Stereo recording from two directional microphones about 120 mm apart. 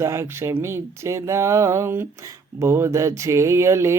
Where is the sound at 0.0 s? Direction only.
25° right (ahead or behind).